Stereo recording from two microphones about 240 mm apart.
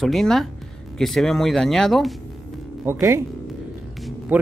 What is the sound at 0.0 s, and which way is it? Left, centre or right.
Speech, centre.